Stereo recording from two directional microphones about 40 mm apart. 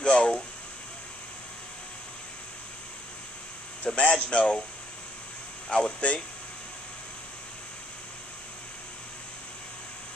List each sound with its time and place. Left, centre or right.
0.0 s a sound: left
3.8 s speech: left
5.7 s speech: left